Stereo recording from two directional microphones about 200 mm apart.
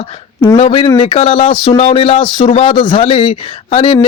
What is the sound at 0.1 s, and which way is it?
Speech, 30° left (ahead or behind).